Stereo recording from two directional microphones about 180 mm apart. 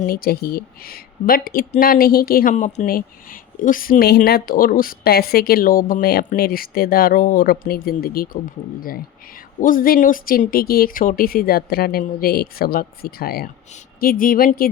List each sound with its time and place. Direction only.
0.0 s speech: 55° left (ahead or behind)
9.6 s speech: 50° left (ahead or behind)